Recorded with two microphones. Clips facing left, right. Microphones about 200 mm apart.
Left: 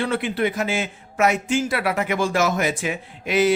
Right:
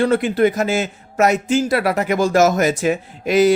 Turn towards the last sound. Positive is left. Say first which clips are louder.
# right 5 dB
turn(degrees=-40)  # may be behind; listen again after turning